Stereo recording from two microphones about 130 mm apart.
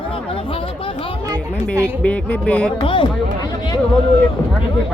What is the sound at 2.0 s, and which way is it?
Speech, 10° left (ahead or behind).